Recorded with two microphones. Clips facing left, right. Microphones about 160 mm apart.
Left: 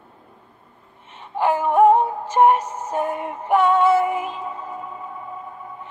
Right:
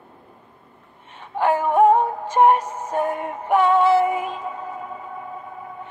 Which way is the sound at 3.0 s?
55° right (ahead or behind).